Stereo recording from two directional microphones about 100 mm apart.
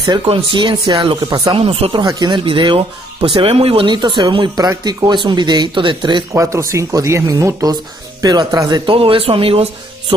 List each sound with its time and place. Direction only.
0.3 s speech: 55° right (ahead or behind)
2.0 s speech: 45° right (ahead or behind); by 3.8 s 75° right (ahead or behind)
3.8 s speech: 50° right (ahead or behind)
6.3 s speech: 30° right (ahead or behind)
8.9 s speech: 65° right (ahead or behind)